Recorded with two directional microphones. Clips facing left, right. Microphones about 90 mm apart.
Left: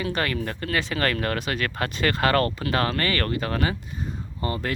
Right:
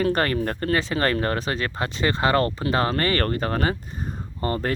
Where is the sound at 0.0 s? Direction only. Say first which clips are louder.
Right 5 dB; 40° right (ahead or behind).